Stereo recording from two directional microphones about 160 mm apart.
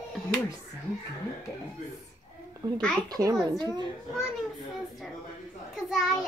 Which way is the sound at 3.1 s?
25° right (ahead or behind).